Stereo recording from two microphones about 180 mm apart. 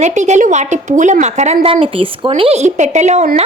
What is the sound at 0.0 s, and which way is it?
Speech, 40° right (ahead or behind).